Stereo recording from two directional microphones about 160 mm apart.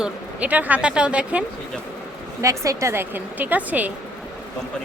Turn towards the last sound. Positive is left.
turn(degrees=-10)  # may be behind; listen again after turning